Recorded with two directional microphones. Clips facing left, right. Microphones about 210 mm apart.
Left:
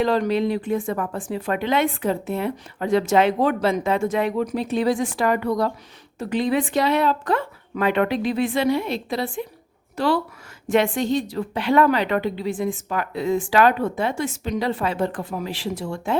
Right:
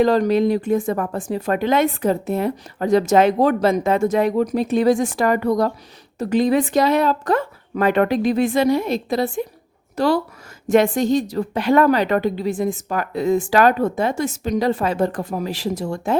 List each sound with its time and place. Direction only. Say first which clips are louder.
0.0 s a woman's voice: right 4 dB; 40° right (ahead or behind)